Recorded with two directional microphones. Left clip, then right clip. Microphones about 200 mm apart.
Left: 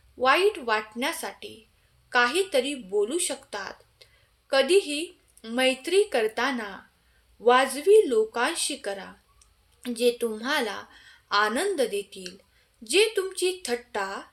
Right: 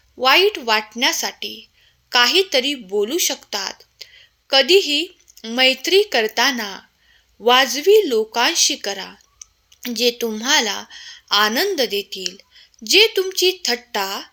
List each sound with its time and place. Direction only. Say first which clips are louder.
0.2 s speech: right 7 dB; 30° right (ahead or behind)